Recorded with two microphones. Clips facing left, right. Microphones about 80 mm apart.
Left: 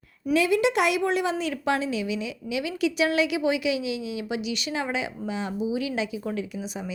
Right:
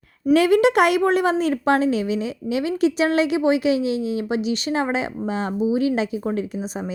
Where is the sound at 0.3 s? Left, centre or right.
Right.